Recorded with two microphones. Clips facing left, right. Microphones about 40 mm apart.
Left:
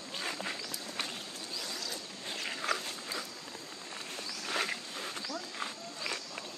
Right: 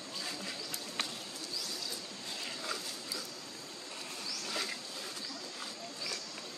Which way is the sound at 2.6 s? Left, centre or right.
Left.